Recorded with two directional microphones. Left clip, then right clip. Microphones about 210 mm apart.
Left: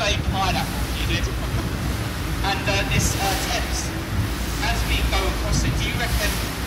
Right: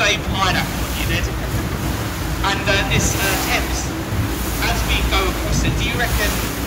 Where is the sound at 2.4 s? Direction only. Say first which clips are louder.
Right 5 dB; 10° left (ahead or behind).